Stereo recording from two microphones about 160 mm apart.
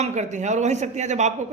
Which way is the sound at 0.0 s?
45° right (ahead or behind).